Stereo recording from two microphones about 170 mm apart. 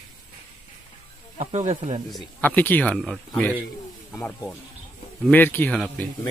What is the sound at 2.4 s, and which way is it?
Speech, 10° left (ahead or behind).